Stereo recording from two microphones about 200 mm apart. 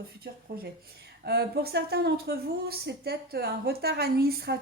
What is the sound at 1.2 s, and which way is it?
Speech, 55° right (ahead or behind).